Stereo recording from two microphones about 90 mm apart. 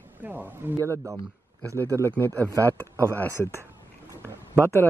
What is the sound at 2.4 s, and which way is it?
Speech, 35° right (ahead or behind).